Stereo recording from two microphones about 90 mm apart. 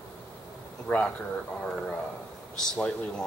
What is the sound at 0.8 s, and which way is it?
Speech, 15° left (ahead or behind).